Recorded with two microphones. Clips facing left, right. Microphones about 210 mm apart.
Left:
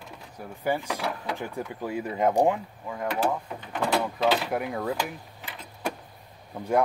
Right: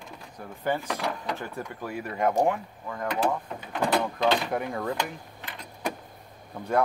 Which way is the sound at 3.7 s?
5° left (ahead or behind).